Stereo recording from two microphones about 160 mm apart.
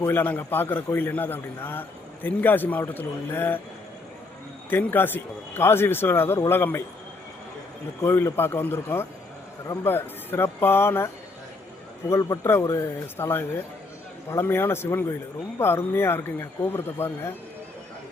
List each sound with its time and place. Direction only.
0.0 s a man's voice: 10° left (ahead or behind)
4.7 s a man's voice: 10° left (ahead or behind)
8.0 s a man's voice: 15° left (ahead or behind)